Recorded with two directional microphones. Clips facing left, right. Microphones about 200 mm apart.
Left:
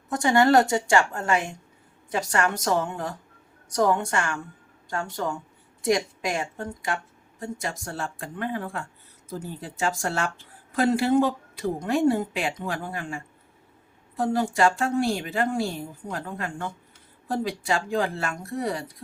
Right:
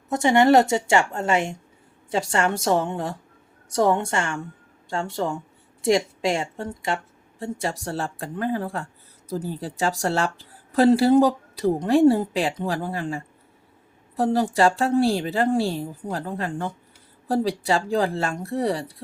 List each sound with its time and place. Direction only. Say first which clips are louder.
0.1 s a woman's voice: right 3 dB; 20° right (ahead or behind)